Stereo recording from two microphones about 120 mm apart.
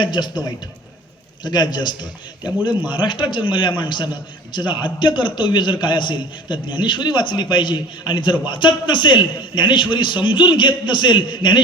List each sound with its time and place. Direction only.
0.0 s a man's voice: 40° left (ahead or behind)